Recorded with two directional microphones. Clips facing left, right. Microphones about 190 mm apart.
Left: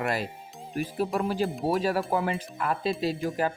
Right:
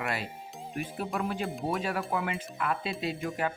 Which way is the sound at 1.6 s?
35° left (ahead or behind).